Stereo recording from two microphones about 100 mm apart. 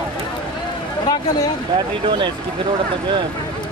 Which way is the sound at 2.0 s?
55° right (ahead or behind).